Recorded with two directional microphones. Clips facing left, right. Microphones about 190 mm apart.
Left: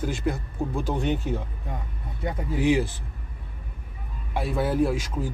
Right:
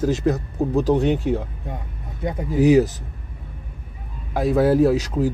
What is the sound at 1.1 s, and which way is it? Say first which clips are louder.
Speech: right 6 dB; 15° right (ahead or behind).